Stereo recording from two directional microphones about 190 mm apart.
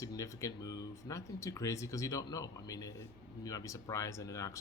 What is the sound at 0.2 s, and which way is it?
Speech, 15° left (ahead or behind).